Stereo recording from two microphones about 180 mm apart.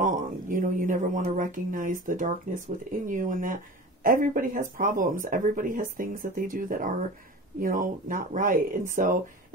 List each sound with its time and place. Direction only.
0.0 s speech: 50° right (ahead or behind)